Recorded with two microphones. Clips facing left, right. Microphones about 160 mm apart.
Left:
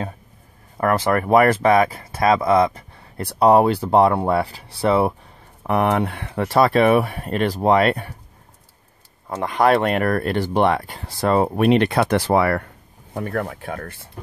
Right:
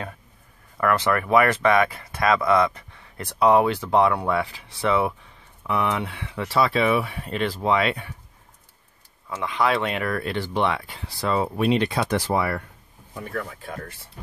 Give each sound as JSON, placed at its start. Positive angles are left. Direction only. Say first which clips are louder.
{"t": 0.7, "sound": "speech", "louder": "left 3 dB", "side_deg": 35}
{"t": 5.6, "sound": "speech", "louder": "left 6 dB", "side_deg": 50}
{"t": 9.3, "sound": "speech", "louder": "left 6 dB", "side_deg": 50}